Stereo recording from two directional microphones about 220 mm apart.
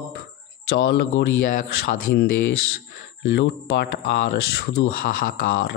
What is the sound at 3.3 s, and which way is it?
Speech, 50° left (ahead or behind).